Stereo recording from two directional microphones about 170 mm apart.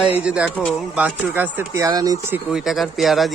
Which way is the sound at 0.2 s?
5° right (ahead or behind).